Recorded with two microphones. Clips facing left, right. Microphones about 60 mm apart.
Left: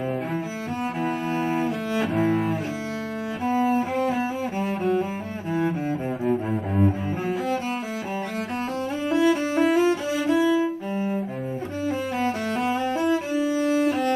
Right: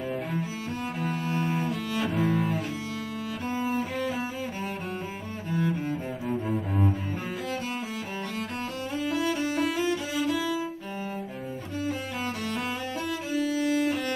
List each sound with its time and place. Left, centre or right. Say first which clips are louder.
1.4 s cello: left 5 dB; centre
2.0 s cello: left 4 dB; left
3.5 s cello: left 7 dB; left
9.1 s cello: left 8 dB; left
10.3 s music: left 8 dB; left
11.8 s music: left 7 dB; left